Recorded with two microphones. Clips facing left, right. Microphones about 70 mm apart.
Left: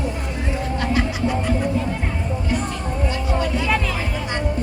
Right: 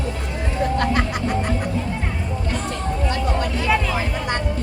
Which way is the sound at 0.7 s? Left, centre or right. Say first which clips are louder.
Left 2 dB; right.